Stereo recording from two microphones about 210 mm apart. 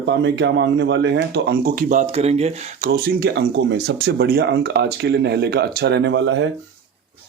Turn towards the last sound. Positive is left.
turn(degrees=-65)  # may be behind; listen again after turning